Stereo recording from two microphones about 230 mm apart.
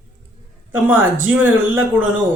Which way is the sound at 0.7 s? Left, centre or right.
Centre.